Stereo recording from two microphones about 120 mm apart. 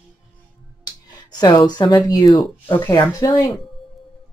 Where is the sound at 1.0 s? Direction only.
35° left (ahead or behind).